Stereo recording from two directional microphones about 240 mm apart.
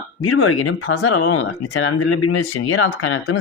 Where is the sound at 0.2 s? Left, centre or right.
Left.